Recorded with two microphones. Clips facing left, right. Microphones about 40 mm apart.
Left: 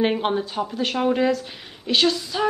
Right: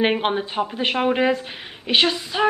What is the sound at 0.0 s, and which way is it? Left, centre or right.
A woman's voice, right.